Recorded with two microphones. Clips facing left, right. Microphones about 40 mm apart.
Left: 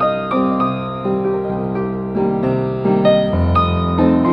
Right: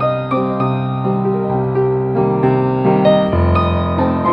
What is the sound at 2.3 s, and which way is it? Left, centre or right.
Music, right.